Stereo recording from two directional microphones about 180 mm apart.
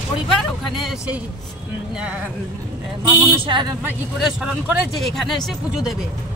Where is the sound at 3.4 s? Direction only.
25° right (ahead or behind).